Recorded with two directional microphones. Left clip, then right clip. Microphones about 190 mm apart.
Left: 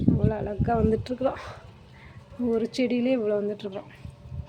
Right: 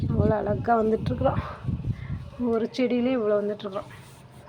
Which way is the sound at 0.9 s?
15° left (ahead or behind).